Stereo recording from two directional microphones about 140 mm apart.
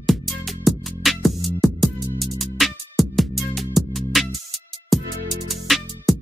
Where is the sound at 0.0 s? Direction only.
Centre (ahead or behind).